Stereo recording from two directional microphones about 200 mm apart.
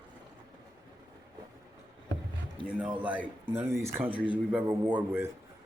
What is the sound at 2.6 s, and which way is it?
A man's voice, 5° right (ahead or behind).